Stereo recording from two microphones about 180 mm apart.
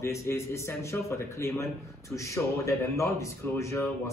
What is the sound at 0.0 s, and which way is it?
A man's voice, 15° left (ahead or behind).